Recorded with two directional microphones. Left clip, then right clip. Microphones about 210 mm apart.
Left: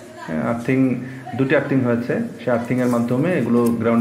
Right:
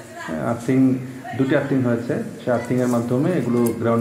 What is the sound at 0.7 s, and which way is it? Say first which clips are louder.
A man's voice: right 3 dB; 35° left (ahead or behind).